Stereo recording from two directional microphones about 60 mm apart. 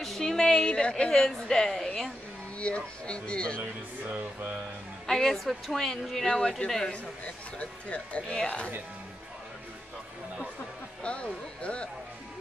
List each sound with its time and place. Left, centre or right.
0.0 s a woman's voice: centre
2.6 s speech: centre
4.1 s music: right
5.0 s a woman's voice: centre
6.9 s speech: centre
11.0 s speech: centre